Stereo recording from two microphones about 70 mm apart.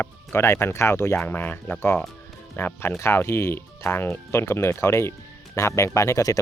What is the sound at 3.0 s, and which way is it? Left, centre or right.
Speech, left.